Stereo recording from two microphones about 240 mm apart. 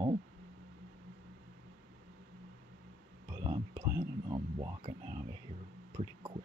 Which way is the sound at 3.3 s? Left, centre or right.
Centre.